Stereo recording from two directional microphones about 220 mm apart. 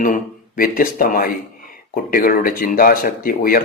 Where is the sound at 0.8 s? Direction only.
40° left (ahead or behind).